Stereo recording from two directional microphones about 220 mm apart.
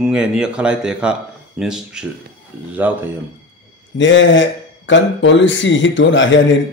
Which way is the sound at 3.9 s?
55° left (ahead or behind).